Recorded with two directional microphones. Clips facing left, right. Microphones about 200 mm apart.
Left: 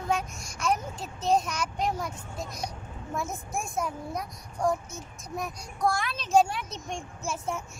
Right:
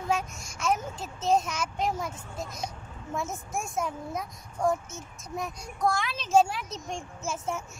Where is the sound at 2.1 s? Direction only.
25° right (ahead or behind).